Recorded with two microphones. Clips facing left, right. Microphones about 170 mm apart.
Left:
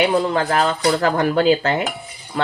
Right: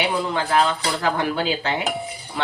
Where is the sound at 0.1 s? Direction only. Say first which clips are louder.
Left 4 dB; 45° left (ahead or behind).